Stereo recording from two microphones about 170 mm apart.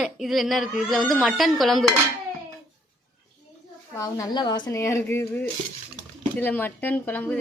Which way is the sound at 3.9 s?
20° left (ahead or behind).